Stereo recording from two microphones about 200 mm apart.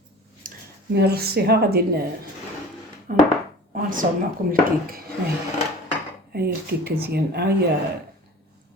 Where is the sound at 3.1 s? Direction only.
45° right (ahead or behind).